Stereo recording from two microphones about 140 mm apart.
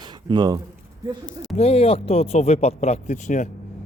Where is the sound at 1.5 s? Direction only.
45° left (ahead or behind).